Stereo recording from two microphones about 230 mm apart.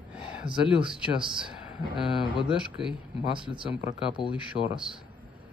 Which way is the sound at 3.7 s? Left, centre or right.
Left.